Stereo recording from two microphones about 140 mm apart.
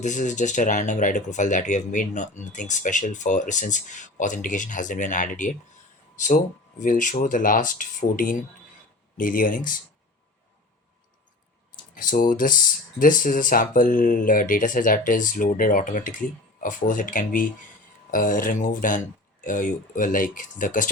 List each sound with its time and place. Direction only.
0.0 s speech: 60° left (ahead or behind)
12.0 s speech: 70° left (ahead or behind)